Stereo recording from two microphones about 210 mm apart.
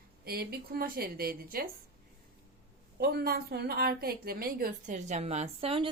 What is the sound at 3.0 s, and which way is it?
A woman's voice, 50° right (ahead or behind).